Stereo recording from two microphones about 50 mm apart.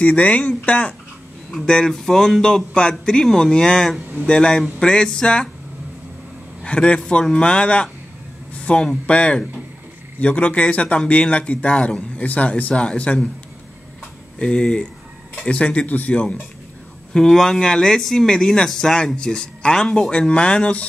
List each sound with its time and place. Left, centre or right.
0.0 s speech: left
1.5 s a man's voice: centre
6.6 s speech: left
8.5 s a sound: left
9.0 s speech: left
14.4 s speech: centre
17.1 s a man's voice: centre